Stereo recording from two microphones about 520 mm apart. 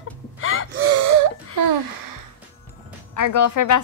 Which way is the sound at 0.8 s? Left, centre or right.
Right.